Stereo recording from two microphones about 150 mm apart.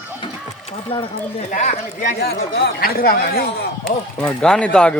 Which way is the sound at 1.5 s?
55° left (ahead or behind).